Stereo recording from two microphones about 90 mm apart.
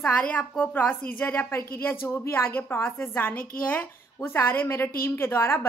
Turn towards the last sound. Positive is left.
turn(degrees=25)  # may be behind; listen again after turning